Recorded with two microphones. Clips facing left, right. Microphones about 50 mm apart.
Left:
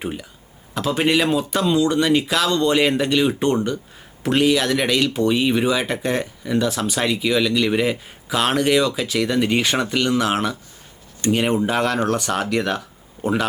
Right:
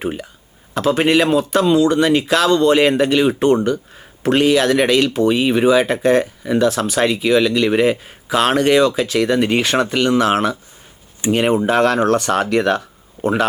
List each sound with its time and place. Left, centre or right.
0.0 s a man's voice: centre